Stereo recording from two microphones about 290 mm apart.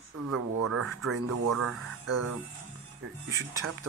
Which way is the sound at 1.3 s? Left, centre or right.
Right.